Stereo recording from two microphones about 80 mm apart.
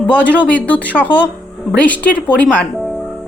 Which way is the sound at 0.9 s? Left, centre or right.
Centre.